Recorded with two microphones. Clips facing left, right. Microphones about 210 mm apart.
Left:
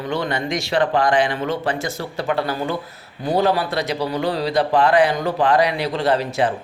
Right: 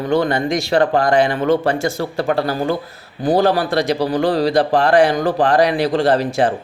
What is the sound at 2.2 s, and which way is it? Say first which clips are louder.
A man's voice: right 3 dB; 40° right (ahead or behind).